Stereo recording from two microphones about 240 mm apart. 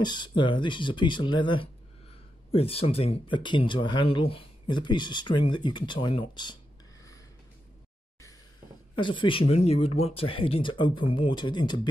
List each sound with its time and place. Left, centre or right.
0.0 s speech: centre
8.9 s speech: left